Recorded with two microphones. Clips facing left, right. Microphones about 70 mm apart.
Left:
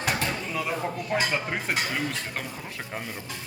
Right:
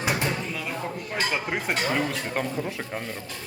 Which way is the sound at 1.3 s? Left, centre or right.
Centre.